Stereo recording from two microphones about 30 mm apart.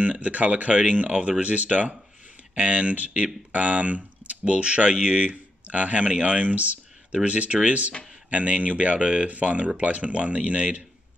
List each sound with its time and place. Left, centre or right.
0.0 s speech: right
6.1 s speech: right
6.4 s speech: right
7.2 s speech: right